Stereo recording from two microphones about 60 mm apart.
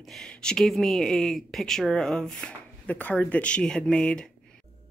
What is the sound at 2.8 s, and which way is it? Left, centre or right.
Speech, left.